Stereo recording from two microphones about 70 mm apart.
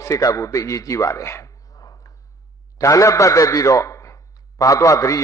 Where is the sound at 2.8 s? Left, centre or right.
Left.